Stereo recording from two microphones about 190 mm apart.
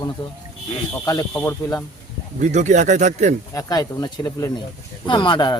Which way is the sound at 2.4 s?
40° right (ahead or behind).